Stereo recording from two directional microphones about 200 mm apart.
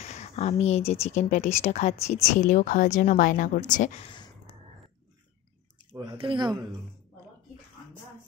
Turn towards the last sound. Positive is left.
turn(degrees=-20)  # may be behind; listen again after turning